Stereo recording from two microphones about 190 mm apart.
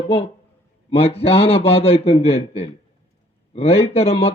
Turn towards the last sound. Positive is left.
turn(degrees=30)  # may be behind; listen again after turning